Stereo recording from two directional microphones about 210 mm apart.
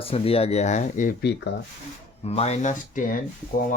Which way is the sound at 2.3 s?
30° left (ahead or behind).